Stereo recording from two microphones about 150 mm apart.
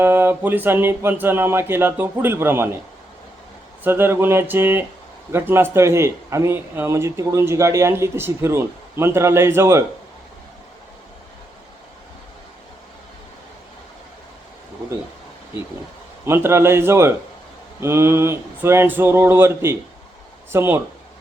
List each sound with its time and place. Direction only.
0.0 s speech: 15° right (ahead or behind)
3.8 s speech: 15° right (ahead or behind)
16.2 s speech: 15° right (ahead or behind)